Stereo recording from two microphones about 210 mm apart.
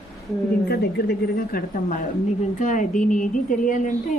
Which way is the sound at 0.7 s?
50° left (ahead or behind).